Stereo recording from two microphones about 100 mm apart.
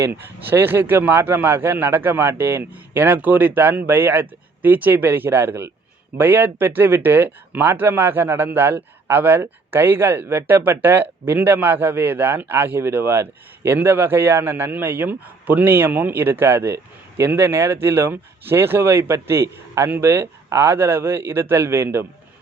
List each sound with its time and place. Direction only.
0.0 s a man's voice: 25° right (ahead or behind)